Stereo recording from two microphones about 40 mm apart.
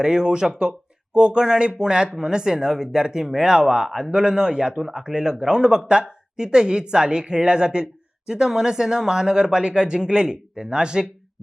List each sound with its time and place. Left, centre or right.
0.0 s speech: centre